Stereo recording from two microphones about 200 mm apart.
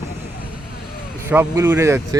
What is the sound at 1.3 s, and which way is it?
Speech, 10° right (ahead or behind).